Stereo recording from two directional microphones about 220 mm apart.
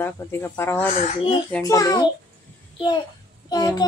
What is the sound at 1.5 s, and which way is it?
A child's voice, 15° left (ahead or behind).